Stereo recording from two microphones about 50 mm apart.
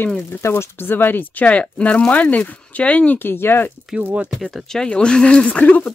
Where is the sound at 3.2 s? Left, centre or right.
Left.